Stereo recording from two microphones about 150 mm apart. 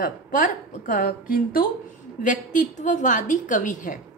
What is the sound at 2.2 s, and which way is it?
A woman's voice, 55° left (ahead or behind).